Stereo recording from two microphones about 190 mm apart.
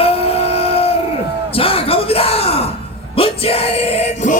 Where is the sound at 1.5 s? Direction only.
30° left (ahead or behind).